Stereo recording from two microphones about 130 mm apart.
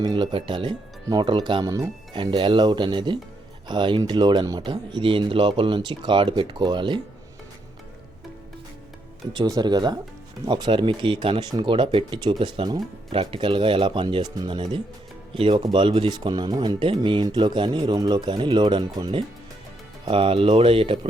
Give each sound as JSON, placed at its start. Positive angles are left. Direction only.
{"t": 0.0, "sound": "speech", "side_deg": -35}
{"t": 2.1, "sound": "speech", "side_deg": -40}
{"t": 9.3, "sound": "speech", "side_deg": -35}
{"t": 20.1, "sound": "speech", "side_deg": -45}